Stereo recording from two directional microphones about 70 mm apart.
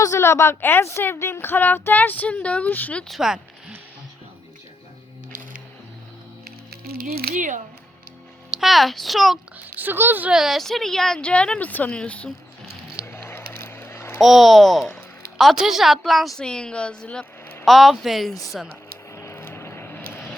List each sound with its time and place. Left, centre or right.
0.0 s a woman's voice: left
3.2 s speech: centre
8.4 s a child's voice: centre
9.6 s speech: right
10.3 s a woman's voice: centre
13.1 s a sound: left
13.7 s a sound: left
14.2 s a woman's voice: centre
16.4 s a woman's voice: centre
17.7 s a child's voice: centre
19.1 s vehicle: left